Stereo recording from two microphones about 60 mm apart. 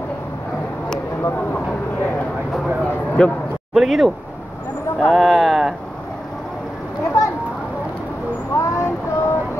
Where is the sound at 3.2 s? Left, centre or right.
Centre.